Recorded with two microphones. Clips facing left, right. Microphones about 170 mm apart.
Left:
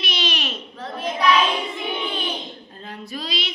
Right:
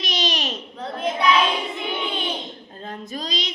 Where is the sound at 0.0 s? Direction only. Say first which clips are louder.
Right 1 dB; 40° right (ahead or behind).